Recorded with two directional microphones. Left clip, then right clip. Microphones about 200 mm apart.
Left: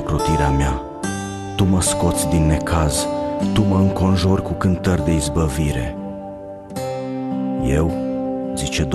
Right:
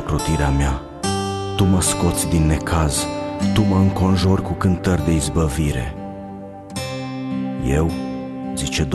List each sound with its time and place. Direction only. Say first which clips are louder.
0.1 s speech: left 3 dB; centre (ahead or behind)
7.6 s speech: even; centre (ahead or behind)